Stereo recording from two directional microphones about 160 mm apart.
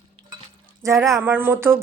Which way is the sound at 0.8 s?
20° right (ahead or behind).